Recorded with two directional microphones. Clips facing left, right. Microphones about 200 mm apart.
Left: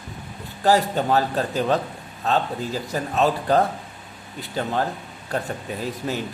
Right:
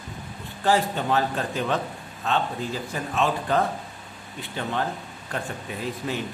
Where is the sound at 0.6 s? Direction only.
40° left (ahead or behind).